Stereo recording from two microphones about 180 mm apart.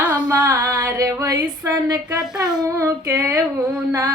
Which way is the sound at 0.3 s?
20° right (ahead or behind).